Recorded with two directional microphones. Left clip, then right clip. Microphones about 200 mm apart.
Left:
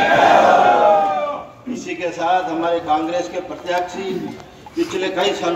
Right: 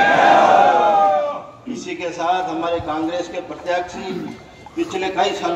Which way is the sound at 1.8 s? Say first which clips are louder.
Left 2 dB; 15° left (ahead or behind).